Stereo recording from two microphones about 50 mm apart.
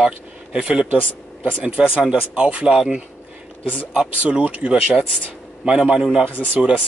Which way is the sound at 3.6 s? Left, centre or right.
Left.